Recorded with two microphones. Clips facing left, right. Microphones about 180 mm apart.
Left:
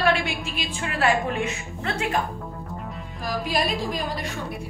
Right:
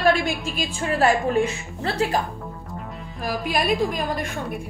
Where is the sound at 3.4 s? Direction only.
55° right (ahead or behind).